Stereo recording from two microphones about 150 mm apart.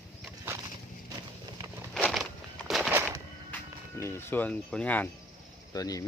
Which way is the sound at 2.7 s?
Centre (ahead or behind).